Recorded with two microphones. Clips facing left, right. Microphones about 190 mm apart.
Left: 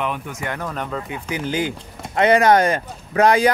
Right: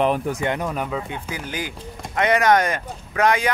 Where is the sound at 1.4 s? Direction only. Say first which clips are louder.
Left 7 dB; 30° left (ahead or behind).